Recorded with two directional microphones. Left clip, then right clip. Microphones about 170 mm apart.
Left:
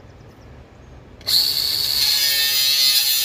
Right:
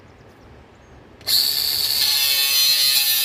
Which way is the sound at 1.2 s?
20° right (ahead or behind).